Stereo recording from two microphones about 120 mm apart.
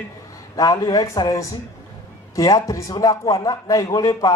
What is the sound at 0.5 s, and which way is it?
A man's voice, 30° left (ahead or behind).